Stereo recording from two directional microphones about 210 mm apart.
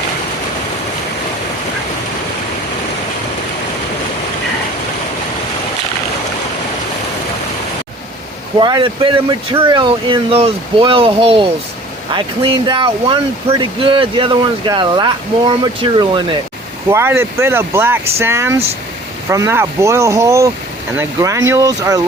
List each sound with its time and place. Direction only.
8.5 s speech: 20° right (ahead or behind)